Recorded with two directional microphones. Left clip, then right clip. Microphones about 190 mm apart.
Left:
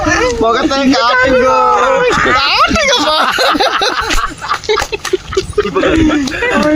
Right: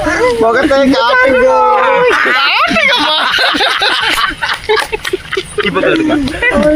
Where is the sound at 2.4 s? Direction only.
90° left.